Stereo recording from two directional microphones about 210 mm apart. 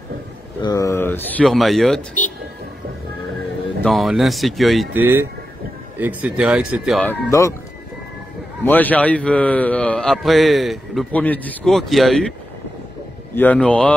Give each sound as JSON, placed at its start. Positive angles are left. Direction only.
{"t": 0.6, "sound": "speech", "side_deg": 15}
{"t": 2.2, "sound": "a man's voice", "side_deg": 35}
{"t": 3.8, "sound": "a man's voice", "side_deg": 0}
{"t": 7.1, "sound": "speech", "side_deg": 15}
{"t": 8.6, "sound": "a man's voice", "side_deg": 10}